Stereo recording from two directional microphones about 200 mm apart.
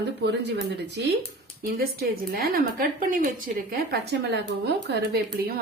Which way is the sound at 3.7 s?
55° right (ahead or behind).